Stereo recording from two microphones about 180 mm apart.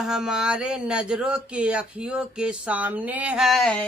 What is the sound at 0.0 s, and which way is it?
Speech, 5° right (ahead or behind).